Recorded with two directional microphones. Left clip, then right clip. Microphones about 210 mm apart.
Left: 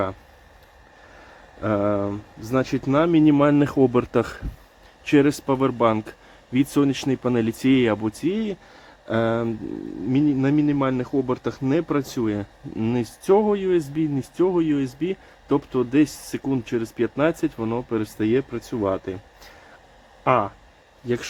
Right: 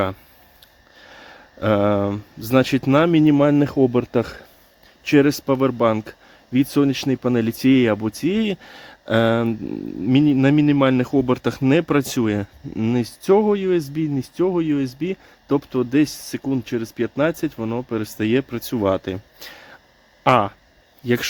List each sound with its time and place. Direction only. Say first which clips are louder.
1.6 s speech: right 4 dB; 50° right (ahead or behind)